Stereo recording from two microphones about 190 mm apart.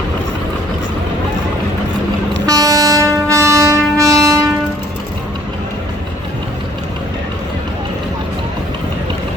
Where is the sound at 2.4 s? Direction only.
20° right (ahead or behind).